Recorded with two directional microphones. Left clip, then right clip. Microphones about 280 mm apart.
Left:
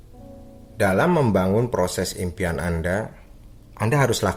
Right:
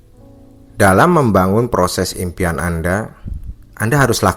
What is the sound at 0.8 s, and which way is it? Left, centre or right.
A man's voice, right.